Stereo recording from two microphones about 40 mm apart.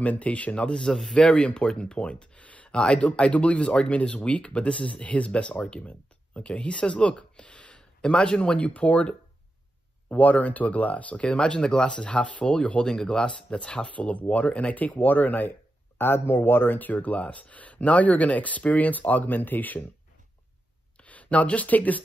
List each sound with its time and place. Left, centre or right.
0.0 s speech: left
0.7 s speech: left
11.1 s speech: left
12.8 s speech: centre; by 15.5 s left
16.0 s speech: left
21.0 s speech: left